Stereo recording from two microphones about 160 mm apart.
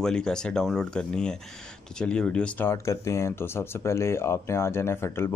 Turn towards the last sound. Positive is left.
turn(degrees=15)  # may be behind; listen again after turning